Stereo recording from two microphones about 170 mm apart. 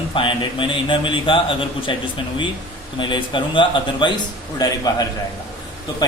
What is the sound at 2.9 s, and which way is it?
Speech, 30° left (ahead or behind).